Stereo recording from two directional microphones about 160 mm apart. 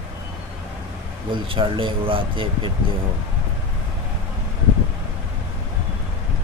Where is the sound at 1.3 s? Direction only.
35° right (ahead or behind).